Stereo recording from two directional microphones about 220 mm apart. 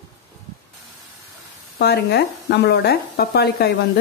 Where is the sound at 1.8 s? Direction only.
45° left (ahead or behind).